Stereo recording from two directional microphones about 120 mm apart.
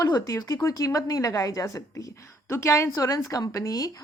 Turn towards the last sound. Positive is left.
turn(degrees=30)  # may be behind; listen again after turning